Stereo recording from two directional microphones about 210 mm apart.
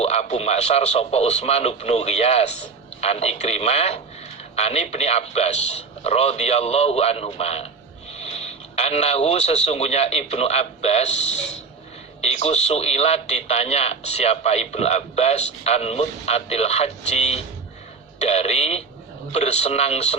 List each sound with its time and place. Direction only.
0.0 s speech: 30° left (ahead or behind)